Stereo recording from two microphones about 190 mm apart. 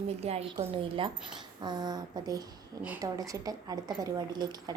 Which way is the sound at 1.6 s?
20° right (ahead or behind).